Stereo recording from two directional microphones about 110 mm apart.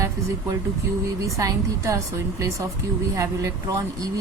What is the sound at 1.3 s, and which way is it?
Speech, 30° right (ahead or behind).